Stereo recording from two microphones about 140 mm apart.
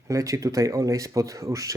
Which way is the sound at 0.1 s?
25° right (ahead or behind).